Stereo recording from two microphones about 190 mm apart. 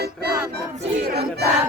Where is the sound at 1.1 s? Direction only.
55° right (ahead or behind).